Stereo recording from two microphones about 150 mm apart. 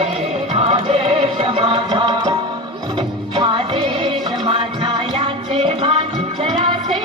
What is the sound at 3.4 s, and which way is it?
Music, 35° right (ahead or behind).